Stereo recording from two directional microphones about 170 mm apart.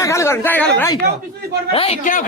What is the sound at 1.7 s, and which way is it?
Speech, 35° left (ahead or behind).